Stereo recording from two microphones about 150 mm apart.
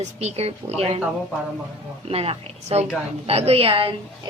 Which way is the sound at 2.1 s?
40° right (ahead or behind).